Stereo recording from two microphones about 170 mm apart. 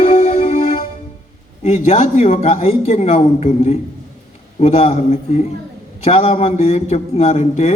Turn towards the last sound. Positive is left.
turn(degrees=45)  # may be behind; listen again after turning